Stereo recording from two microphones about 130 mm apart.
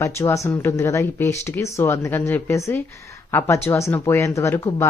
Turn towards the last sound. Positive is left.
turn(degrees=20)  # may be behind; listen again after turning